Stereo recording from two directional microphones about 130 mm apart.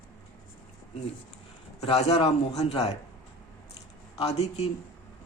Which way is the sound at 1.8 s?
50° left (ahead or behind).